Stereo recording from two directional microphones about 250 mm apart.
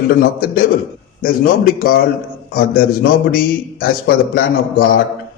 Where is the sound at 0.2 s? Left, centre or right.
Left.